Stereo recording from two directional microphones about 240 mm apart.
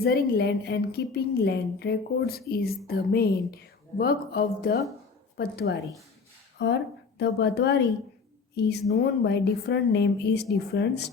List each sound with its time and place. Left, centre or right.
0.0 s a woman's voice: left